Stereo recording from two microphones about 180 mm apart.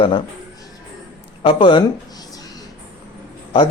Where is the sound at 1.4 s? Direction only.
25° left (ahead or behind).